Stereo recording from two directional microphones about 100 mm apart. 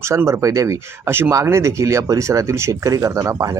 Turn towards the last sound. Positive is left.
turn(degrees=-35)  # may be behind; listen again after turning